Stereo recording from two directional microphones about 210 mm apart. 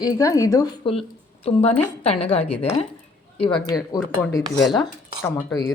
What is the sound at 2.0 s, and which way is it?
A woman's voice, 30° left (ahead or behind).